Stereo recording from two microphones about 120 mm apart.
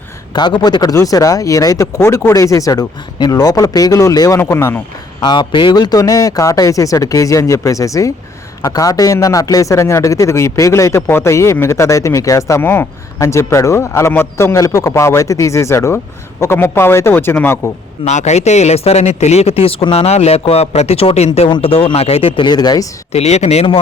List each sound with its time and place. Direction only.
0.3 s speech: 35° left (ahead or behind); by 4.8 s 20° left (ahead or behind)
5.2 s speech: 40° left (ahead or behind); by 17.6 s 20° left (ahead or behind)
18.0 s speech: 75° left (ahead or behind); by 22.9 s 35° left (ahead or behind)
23.1 s speech: 65° left (ahead or behind)